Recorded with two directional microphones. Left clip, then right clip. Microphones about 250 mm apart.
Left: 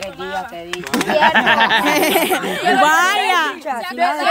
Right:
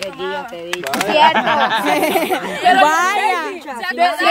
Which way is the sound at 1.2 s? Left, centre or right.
Left.